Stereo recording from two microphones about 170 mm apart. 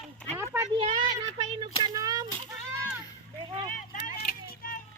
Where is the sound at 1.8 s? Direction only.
20° right (ahead or behind).